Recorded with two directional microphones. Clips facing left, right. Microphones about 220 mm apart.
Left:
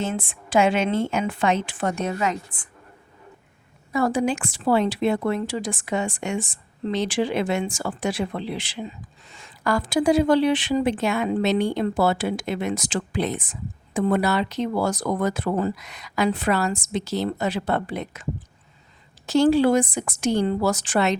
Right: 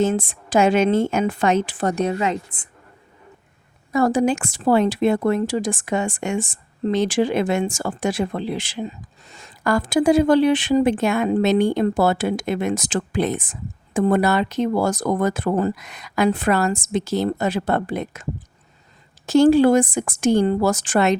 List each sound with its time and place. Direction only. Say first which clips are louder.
0.0 s a woman's voice: right 7 dB; 40° right (ahead or behind)
3.9 s speech: right 4 dB; 45° right (ahead or behind)